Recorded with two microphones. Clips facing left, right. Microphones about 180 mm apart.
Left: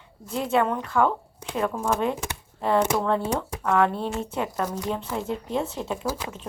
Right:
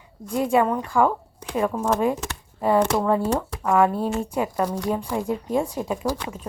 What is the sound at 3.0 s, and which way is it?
Speech, 10° right (ahead or behind).